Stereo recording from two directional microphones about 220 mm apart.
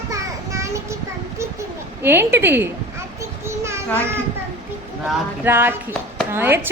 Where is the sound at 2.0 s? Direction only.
10° right (ahead or behind).